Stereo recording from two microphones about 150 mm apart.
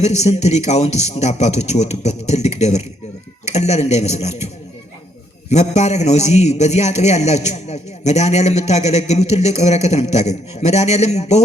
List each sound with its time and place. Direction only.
0.0 s a man's voice: 45° left (ahead or behind)
5.5 s a man's voice: 50° left (ahead or behind)